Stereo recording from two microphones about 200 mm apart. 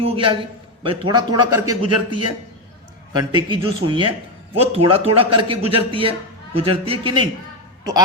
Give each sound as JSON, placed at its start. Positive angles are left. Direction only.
{"t": 0.0, "sound": "a man's voice", "side_deg": -25}
{"t": 3.2, "sound": "a man's voice", "side_deg": -20}